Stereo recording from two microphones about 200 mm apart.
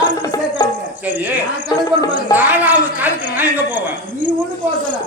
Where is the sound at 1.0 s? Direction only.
10° right (ahead or behind).